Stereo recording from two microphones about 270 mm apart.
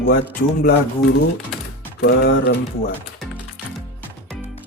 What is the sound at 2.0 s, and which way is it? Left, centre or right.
Speech, left.